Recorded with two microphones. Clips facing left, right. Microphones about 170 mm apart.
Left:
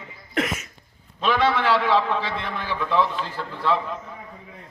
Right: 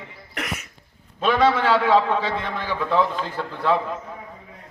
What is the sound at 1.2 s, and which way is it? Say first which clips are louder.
A man's voice: right 2 dB; 45° right (ahead or behind).